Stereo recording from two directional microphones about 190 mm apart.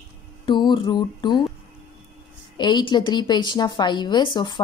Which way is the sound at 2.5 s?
25° left (ahead or behind).